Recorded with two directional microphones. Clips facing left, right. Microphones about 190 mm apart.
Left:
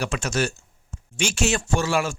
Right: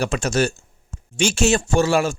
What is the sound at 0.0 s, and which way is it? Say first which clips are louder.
Speech: right 5 dB; 30° right (ahead or behind).